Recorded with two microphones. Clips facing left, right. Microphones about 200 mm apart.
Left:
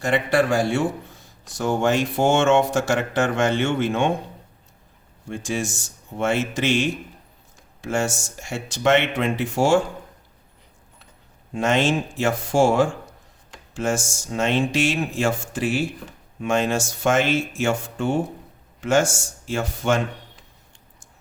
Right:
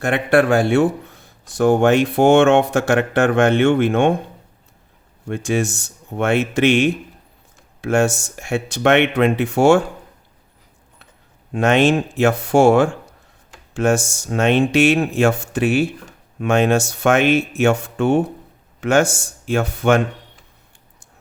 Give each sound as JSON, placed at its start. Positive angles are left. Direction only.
{"t": 0.0, "sound": "speech", "side_deg": -60}
{"t": 5.3, "sound": "speech", "side_deg": -65}
{"t": 11.5, "sound": "speech", "side_deg": -60}